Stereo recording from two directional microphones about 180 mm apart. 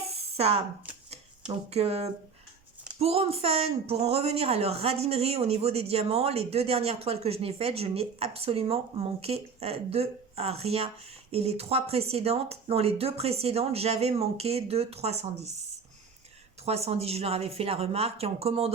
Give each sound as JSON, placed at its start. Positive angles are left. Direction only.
{"t": 0.3, "sound": "speech", "side_deg": -35}
{"t": 1.7, "sound": "speech", "side_deg": -35}
{"t": 16.6, "sound": "speech", "side_deg": -35}